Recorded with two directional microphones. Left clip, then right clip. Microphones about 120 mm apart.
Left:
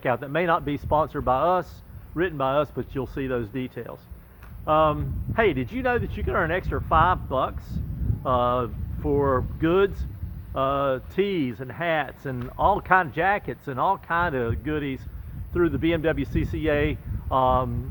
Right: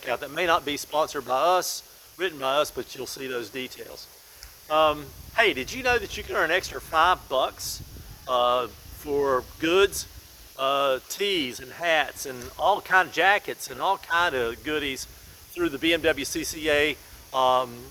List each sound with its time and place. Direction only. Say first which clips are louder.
0.1 s speech: even; 20° right (ahead or behind)